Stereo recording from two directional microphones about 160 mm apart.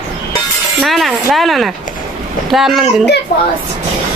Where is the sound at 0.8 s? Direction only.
Centre (ahead or behind).